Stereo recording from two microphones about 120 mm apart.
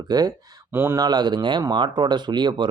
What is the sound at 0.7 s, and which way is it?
Speech, 20° right (ahead or behind).